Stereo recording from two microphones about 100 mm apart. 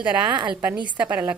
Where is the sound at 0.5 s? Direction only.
10° right (ahead or behind).